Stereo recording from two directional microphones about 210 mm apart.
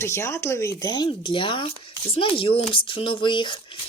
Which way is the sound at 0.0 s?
15° left (ahead or behind).